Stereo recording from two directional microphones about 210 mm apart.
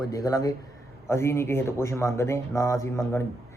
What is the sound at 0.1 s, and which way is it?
A man's voice, 15° left (ahead or behind).